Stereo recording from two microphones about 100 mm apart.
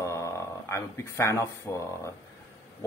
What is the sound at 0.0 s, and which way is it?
Speech, 35° left (ahead or behind).